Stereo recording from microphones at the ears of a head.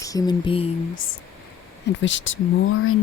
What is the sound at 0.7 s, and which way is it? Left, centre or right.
Speech, left.